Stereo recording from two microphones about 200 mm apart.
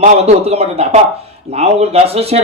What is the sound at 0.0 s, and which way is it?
Speech, 30° right (ahead or behind).